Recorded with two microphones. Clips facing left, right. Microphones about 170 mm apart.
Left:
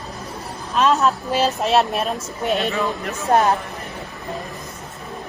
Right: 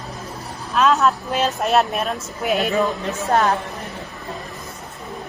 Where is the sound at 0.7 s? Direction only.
Centre (ahead or behind).